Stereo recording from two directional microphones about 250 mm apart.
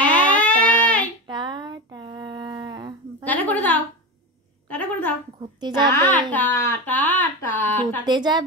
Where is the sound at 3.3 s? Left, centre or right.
Centre.